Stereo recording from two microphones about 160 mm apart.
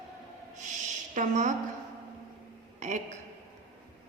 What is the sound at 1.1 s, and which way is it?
Speech, 50° right (ahead or behind).